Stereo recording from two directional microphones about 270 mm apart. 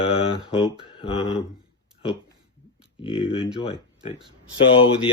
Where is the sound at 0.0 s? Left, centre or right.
Centre.